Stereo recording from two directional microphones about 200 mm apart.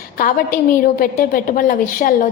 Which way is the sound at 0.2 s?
45° left (ahead or behind).